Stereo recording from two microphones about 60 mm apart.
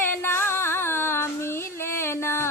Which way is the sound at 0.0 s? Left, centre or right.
Left.